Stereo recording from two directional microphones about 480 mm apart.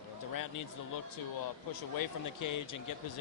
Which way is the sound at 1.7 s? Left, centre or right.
Left.